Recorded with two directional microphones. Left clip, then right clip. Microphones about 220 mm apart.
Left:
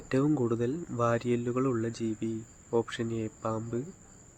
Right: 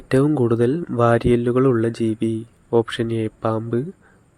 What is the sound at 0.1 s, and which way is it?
Speech, 30° right (ahead or behind).